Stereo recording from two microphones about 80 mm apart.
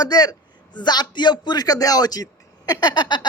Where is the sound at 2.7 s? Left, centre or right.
Left.